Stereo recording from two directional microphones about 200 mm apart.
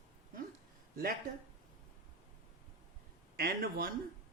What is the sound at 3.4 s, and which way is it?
Speech, 50° right (ahead or behind).